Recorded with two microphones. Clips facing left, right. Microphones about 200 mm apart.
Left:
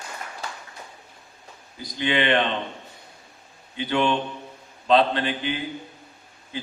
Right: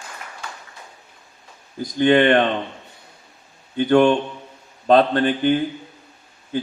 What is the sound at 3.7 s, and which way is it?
A man's voice, 50° right (ahead or behind).